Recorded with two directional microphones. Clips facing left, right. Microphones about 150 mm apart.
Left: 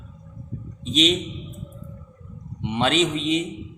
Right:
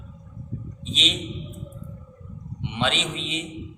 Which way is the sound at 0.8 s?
45° left (ahead or behind).